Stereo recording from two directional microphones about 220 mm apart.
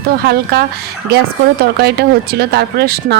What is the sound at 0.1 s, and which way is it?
Speech, 45° right (ahead or behind).